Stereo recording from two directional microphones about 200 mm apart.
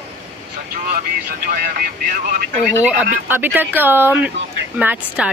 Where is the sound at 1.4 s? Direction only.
45° right (ahead or behind).